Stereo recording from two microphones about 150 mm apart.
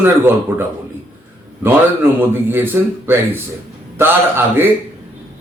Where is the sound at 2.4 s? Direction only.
15° right (ahead or behind).